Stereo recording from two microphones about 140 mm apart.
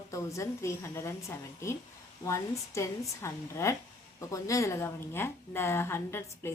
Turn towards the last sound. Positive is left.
turn(degrees=20)  # may be behind; listen again after turning